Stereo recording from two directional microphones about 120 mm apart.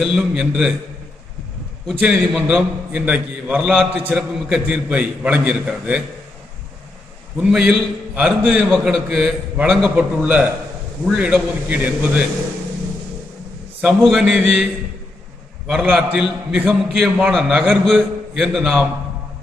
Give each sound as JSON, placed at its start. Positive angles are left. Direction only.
{"t": 0.0, "sound": "a man's voice", "side_deg": -5}
{"t": 2.0, "sound": "a man's voice", "side_deg": -10}
{"t": 7.3, "sound": "a man's voice", "side_deg": -10}
{"t": 14.0, "sound": "a man's voice", "side_deg": 0}
{"t": 15.7, "sound": "a man's voice", "side_deg": -10}
{"t": 17.0, "sound": "a man's voice", "side_deg": 0}